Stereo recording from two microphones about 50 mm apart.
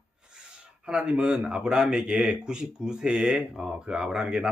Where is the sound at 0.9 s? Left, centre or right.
Centre.